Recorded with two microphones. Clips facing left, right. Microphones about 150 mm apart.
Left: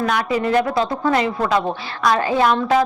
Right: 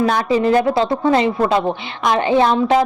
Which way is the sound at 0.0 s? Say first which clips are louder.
Right 4 dB; 30° right (ahead or behind).